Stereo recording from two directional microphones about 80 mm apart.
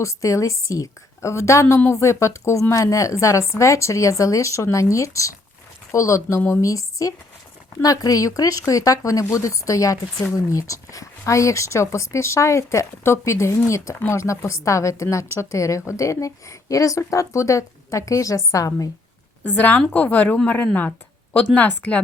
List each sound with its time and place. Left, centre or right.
0.0 s a woman's voice: left
19.5 s speech: left